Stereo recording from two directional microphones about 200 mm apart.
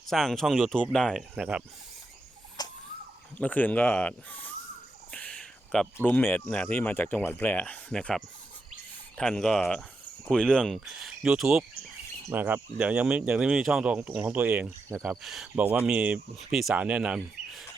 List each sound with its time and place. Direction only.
0.1 s speech: centre (ahead or behind)
2.6 s a sound: 20° left (ahead or behind)
3.4 s speech: 10° left (ahead or behind)